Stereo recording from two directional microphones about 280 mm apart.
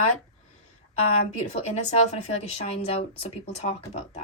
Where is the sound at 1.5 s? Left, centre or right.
Left.